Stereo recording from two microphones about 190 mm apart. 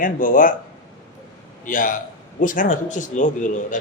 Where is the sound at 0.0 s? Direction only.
45° left (ahead or behind).